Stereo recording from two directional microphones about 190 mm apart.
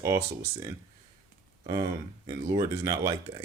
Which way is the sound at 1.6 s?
25° right (ahead or behind).